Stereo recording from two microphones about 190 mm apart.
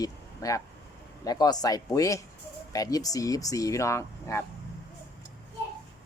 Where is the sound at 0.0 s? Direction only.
20° left (ahead or behind).